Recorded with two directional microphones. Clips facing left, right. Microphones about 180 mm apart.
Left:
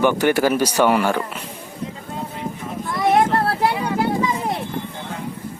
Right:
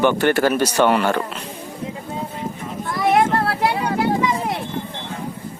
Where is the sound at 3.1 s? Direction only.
25° left (ahead or behind).